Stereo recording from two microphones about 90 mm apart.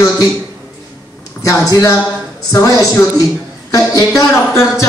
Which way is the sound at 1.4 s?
35° left (ahead or behind).